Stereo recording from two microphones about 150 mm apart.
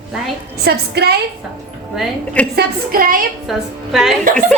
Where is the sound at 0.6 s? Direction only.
90° right.